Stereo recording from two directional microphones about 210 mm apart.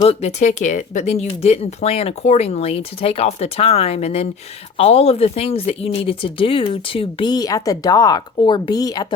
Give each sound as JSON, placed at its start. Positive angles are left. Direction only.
{"t": 0.0, "sound": "speech", "side_deg": 30}